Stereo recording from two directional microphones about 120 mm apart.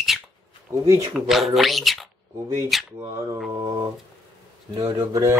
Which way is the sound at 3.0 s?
25° right (ahead or behind).